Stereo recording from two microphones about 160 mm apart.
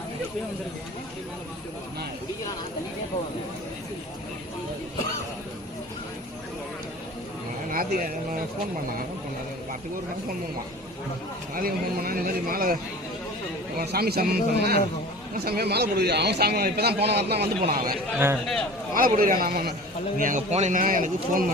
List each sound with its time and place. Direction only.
7.7 s a man's voice: 65° right (ahead or behind)
11.5 s a man's voice: 65° right (ahead or behind)
13.7 s a man's voice: 75° right (ahead or behind)
18.9 s a man's voice: 60° right (ahead or behind)
20.1 s a man's voice: 55° right (ahead or behind)